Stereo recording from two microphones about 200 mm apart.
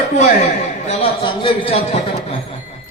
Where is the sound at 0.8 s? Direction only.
30° left (ahead or behind).